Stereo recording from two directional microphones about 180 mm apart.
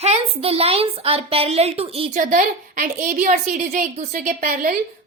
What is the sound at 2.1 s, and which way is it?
A woman's voice, 50° right (ahead or behind).